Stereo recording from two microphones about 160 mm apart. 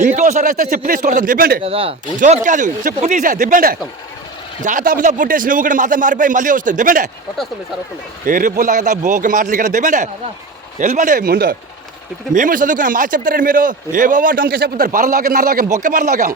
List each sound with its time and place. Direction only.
0.0 s a man's voice: 50° right (ahead or behind); by 1.6 s 65° right (ahead or behind)
1.6 s speech: 35° right (ahead or behind)
2.1 s a man's voice: 50° right (ahead or behind)
8.3 s a man's voice: 60° right (ahead or behind)
12.3 s a man's voice: 55° right (ahead or behind); by 15.6 s 75° right (ahead or behind)
15.7 s a man's voice: 55° right (ahead or behind)